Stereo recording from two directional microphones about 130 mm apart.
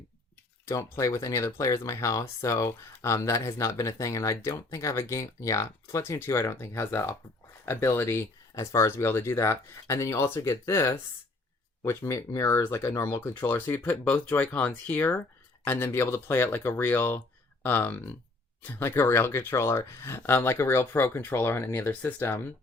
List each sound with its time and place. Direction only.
0.7 s speech: 20° left (ahead or behind)